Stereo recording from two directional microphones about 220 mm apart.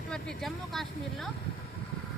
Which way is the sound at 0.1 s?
Centre (ahead or behind).